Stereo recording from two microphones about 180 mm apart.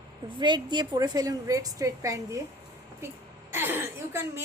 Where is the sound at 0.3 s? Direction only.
25° right (ahead or behind).